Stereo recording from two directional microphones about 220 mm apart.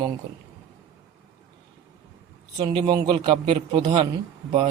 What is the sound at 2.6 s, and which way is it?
A man's voice, 20° right (ahead or behind).